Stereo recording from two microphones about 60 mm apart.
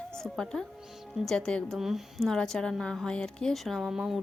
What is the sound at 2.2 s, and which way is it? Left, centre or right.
A woman's voice, centre.